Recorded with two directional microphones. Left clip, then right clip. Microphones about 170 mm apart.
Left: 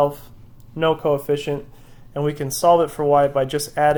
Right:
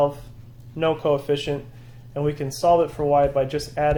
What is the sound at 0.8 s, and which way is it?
Speech, 40° left (ahead or behind).